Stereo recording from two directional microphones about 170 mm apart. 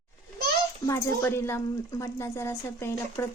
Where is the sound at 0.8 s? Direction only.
15° left (ahead or behind).